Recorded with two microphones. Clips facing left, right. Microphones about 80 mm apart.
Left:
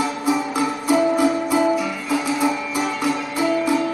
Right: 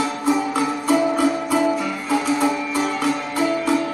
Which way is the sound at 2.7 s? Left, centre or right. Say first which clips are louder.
Right 1 dB; centre.